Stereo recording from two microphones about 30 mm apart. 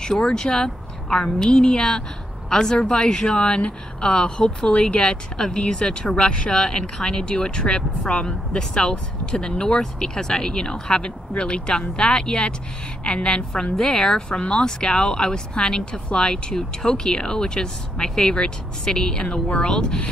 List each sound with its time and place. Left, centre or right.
0.3 s speech: left
3.3 s speech: left
5.0 s speech: left
8.0 s speech: left
8.3 s speech: left
13.7 s speech: centre